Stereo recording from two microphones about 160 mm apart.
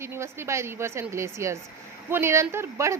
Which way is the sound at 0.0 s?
15° right (ahead or behind).